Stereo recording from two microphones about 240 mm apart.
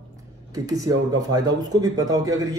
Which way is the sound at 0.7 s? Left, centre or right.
Centre.